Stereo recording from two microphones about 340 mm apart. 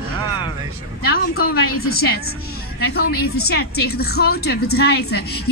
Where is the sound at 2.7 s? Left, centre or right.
Left.